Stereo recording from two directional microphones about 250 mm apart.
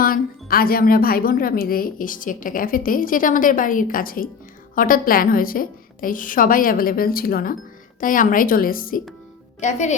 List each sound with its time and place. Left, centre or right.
0.0 s speech: left